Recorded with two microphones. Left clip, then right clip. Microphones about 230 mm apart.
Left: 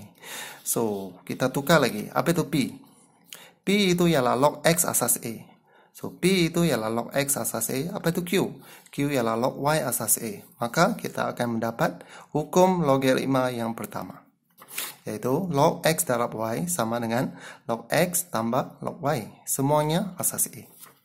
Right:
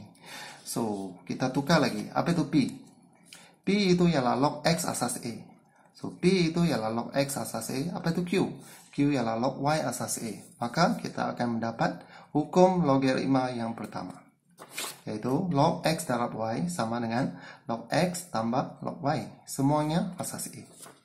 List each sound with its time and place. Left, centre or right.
0.2 s speech: left